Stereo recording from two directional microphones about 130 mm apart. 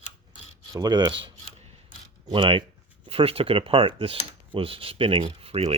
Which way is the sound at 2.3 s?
40° right (ahead or behind).